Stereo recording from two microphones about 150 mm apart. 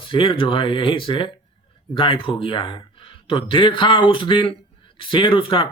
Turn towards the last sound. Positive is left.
turn(degrees=35)  # may be behind; listen again after turning